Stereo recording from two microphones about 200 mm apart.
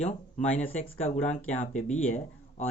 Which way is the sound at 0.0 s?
35° left (ahead or behind).